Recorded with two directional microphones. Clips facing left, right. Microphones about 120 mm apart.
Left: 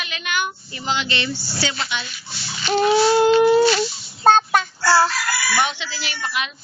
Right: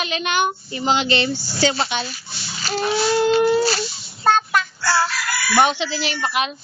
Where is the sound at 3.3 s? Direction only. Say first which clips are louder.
Left 3 dB; 35° right (ahead or behind).